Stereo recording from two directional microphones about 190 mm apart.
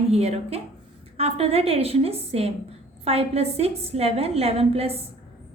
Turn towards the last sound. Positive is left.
turn(degrees=-30)  # may be behind; listen again after turning